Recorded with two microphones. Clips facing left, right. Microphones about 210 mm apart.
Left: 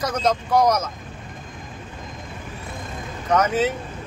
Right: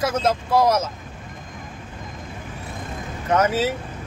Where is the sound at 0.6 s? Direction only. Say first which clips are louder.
Right 1 dB; 25° right (ahead or behind).